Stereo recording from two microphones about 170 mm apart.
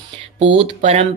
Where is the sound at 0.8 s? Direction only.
40° right (ahead or behind).